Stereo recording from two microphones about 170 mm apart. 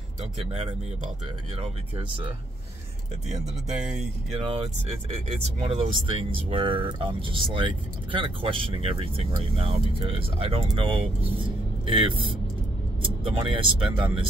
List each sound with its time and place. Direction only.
0.2 s speech: 35° right (ahead or behind)
3.8 s speech: 5° right (ahead or behind)
5.1 s speech: 35° right (ahead or behind)